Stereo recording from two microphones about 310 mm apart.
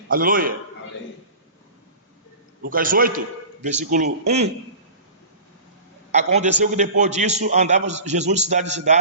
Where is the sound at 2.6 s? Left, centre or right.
Right.